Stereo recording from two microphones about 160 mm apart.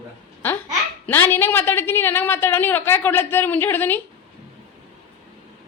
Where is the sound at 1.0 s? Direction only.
15° left (ahead or behind).